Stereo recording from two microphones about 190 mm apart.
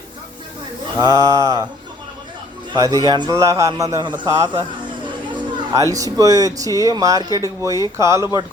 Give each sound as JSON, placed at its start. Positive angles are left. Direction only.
{"t": 0.9, "sound": "a man's voice", "side_deg": -20}
{"t": 2.7, "sound": "a man's voice", "side_deg": -20}
{"t": 5.0, "sound": "chatter", "side_deg": -25}
{"t": 5.9, "sound": "speech", "side_deg": -20}